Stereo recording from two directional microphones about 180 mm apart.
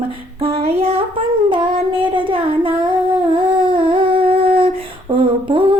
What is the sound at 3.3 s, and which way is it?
Humming, 30° right (ahead or behind).